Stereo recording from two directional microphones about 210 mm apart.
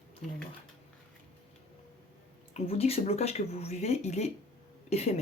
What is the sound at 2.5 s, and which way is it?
Speech, 30° left (ahead or behind).